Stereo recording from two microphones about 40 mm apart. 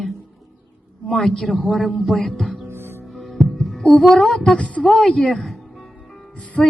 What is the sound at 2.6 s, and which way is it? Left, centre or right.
Music, right.